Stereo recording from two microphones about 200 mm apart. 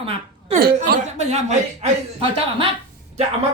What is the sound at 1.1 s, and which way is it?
Speech, 35° right (ahead or behind).